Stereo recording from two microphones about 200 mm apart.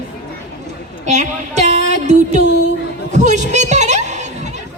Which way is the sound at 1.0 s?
35° right (ahead or behind).